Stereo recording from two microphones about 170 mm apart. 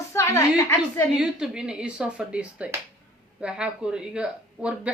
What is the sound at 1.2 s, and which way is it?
A woman's voice, 5° right (ahead or behind).